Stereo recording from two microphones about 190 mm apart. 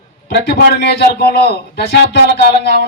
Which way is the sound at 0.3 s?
65° left (ahead or behind).